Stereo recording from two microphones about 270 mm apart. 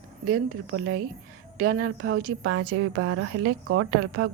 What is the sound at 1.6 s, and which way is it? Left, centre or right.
Speech, right.